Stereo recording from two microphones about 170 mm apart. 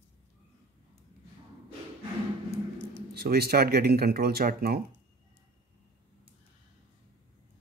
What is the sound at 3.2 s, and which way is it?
Speech, 65° right (ahead or behind).